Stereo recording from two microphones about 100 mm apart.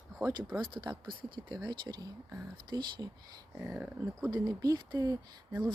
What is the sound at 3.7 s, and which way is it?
Speech, 5° right (ahead or behind).